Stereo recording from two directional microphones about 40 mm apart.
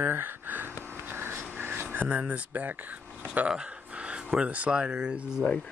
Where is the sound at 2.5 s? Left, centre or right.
Right.